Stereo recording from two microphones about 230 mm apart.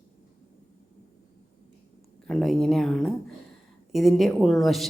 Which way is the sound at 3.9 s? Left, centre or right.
Centre.